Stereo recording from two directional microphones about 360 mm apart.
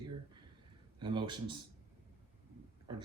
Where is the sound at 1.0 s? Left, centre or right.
Centre.